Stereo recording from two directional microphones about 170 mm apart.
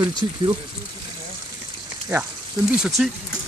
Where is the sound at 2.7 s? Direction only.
5° right (ahead or behind).